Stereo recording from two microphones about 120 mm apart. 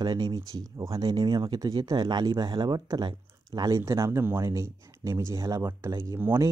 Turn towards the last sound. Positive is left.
turn(degrees=-20)  # may be behind; listen again after turning